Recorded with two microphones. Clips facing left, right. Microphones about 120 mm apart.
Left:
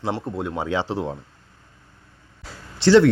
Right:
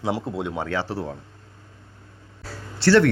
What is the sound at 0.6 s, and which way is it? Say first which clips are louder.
Speech: left 2 dB; 15° left (ahead or behind).